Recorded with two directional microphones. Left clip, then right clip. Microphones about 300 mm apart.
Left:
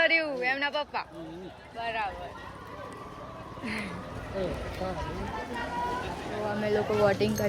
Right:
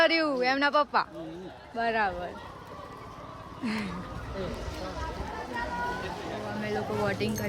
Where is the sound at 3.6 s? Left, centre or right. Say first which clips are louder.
Right 1 dB; centre.